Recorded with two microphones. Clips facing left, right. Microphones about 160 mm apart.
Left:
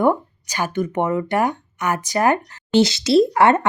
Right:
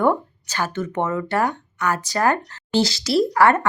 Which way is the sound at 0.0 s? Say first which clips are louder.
Left 2 dB; 15° left (ahead or behind).